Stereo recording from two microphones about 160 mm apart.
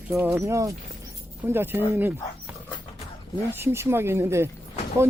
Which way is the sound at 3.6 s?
15° right (ahead or behind).